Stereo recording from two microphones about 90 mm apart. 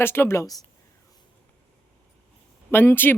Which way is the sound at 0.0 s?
25° left (ahead or behind).